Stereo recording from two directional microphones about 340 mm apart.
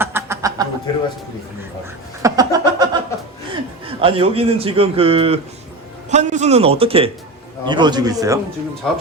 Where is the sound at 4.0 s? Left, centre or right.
Centre.